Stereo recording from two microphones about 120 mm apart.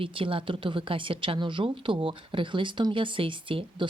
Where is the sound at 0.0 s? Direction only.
45° right (ahead or behind).